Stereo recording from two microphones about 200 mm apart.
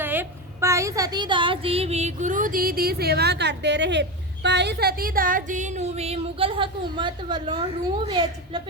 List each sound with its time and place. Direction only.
0.0 s a woman's voice: 10° right (ahead or behind)